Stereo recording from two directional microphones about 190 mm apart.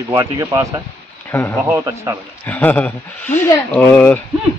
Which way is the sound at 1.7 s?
15° right (ahead or behind).